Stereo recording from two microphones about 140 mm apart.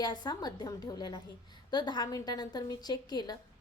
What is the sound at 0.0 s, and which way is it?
A woman's voice, 30° left (ahead or behind).